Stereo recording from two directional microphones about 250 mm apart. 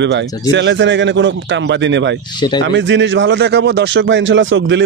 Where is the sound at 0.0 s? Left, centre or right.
Right.